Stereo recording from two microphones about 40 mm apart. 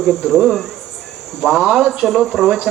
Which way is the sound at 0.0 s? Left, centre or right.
Centre.